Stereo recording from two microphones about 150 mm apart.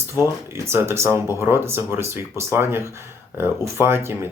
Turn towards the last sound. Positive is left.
turn(degrees=-15)  # may be behind; listen again after turning